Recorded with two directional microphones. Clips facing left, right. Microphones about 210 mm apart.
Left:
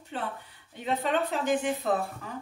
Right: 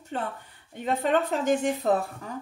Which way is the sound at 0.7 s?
45° right (ahead or behind).